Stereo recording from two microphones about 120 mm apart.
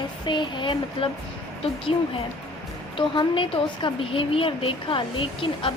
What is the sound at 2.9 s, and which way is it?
Speech, 45° left (ahead or behind).